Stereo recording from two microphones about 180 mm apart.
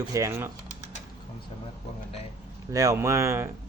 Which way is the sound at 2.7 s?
15° right (ahead or behind).